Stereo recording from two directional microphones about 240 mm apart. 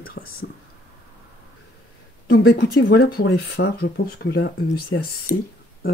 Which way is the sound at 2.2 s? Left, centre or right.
Left.